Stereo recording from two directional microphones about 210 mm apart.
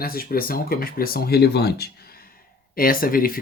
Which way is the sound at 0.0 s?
45° left (ahead or behind).